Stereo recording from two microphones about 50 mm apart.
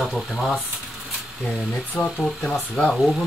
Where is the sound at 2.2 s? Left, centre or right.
Centre.